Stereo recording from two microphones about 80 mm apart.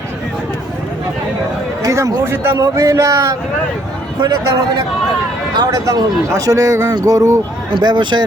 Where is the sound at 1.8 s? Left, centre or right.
Right.